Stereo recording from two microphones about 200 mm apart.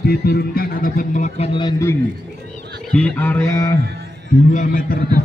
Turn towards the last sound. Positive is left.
turn(degrees=45)  # may be behind; listen again after turning